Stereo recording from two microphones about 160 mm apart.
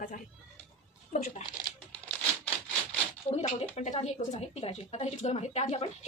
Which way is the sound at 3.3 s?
40° left (ahead or behind).